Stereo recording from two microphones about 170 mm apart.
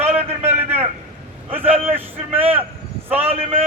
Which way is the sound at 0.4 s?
10° right (ahead or behind).